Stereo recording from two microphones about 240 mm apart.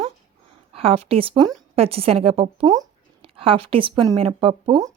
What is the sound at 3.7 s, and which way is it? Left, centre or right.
A woman's voice, right.